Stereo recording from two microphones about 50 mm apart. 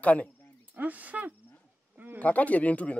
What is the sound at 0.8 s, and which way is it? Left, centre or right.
Speech, right.